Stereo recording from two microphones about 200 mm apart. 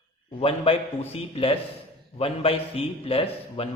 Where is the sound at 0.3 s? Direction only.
25° left (ahead or behind).